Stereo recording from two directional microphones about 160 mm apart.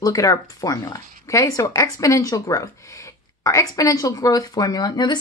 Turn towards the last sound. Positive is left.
turn(degrees=25)  # may be behind; listen again after turning